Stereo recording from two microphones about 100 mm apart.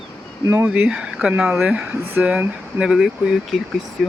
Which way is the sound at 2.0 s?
20° right (ahead or behind).